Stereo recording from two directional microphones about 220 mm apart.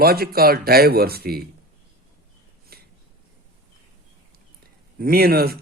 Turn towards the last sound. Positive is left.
turn(degrees=-45)  # may be behind; listen again after turning